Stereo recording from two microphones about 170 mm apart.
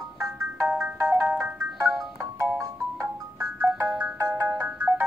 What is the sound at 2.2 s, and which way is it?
Music, 20° right (ahead or behind).